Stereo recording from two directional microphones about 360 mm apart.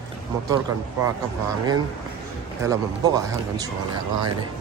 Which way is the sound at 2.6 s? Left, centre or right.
Centre.